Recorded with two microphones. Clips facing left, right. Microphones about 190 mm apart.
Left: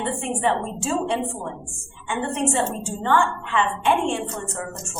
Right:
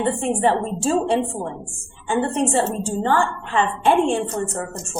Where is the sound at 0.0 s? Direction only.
35° right (ahead or behind).